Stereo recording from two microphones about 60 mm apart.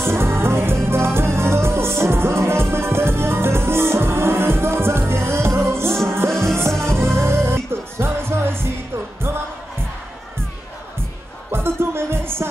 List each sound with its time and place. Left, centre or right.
0.0 s music: right
11.5 s music: right